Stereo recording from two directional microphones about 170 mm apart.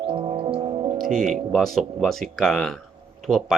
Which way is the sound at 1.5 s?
Centre (ahead or behind).